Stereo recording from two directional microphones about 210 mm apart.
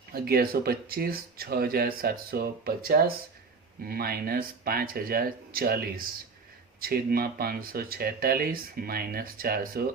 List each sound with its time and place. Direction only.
0.1 s speech: 45° right (ahead or behind)